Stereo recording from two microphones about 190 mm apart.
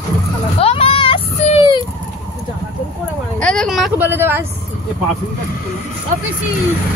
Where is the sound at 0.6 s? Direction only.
30° left (ahead or behind).